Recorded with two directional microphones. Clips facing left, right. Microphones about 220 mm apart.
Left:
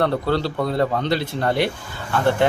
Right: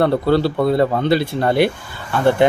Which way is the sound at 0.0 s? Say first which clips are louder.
Right 5 dB; 10° right (ahead or behind).